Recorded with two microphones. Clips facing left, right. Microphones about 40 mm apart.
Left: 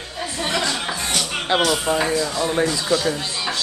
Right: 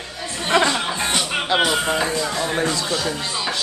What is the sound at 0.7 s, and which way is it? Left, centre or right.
Music, right.